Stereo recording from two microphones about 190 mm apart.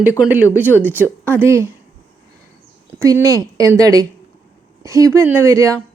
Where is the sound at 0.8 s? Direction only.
10° right (ahead or behind).